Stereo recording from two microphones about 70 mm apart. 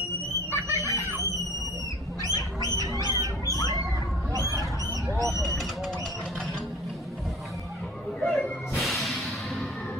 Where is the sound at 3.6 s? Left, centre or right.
Left.